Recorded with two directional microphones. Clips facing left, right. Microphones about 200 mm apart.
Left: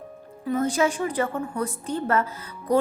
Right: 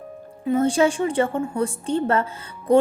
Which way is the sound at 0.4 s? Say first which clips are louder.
Right 4 dB; 30° right (ahead or behind).